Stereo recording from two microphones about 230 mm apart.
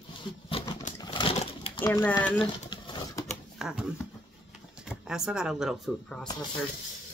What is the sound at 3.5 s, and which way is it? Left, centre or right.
Speech, centre.